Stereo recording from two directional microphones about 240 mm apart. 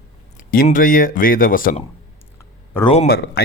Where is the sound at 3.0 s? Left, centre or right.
Left.